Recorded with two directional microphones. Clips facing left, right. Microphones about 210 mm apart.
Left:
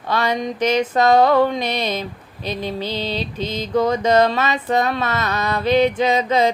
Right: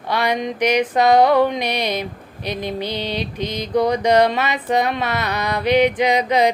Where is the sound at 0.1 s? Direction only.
15° right (ahead or behind).